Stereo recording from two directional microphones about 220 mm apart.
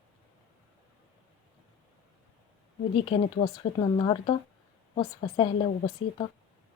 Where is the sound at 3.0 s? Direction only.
25° left (ahead or behind).